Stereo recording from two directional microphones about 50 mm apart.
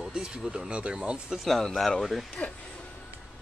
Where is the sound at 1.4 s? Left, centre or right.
Centre.